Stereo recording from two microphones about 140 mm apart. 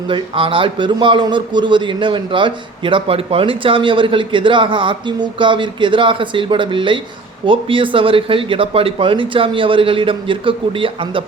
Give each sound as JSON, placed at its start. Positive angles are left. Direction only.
{"t": 0.1, "sound": "a man's voice", "side_deg": -40}